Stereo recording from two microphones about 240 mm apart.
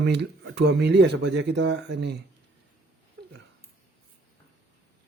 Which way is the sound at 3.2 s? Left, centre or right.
Right.